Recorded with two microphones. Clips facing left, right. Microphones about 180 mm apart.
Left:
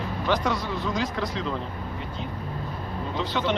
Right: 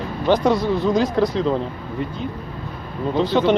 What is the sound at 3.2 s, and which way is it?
Speech, 35° right (ahead or behind).